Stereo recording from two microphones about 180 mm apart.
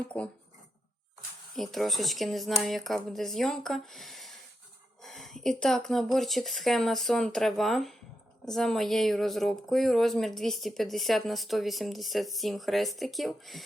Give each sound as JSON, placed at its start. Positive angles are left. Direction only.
{"t": 0.1, "sound": "speech", "side_deg": 5}
{"t": 1.5, "sound": "speech", "side_deg": 0}